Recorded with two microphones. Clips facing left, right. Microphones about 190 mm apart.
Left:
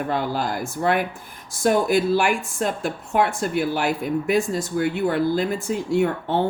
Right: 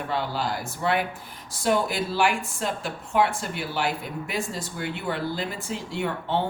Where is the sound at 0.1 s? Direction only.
50° left (ahead or behind).